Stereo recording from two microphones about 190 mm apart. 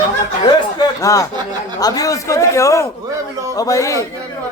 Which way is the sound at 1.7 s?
20° left (ahead or behind).